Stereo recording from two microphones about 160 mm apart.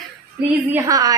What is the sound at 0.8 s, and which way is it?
Speech, 25° right (ahead or behind).